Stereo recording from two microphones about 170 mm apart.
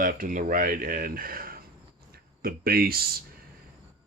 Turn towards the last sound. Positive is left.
turn(degrees=-65)  # may be behind; listen again after turning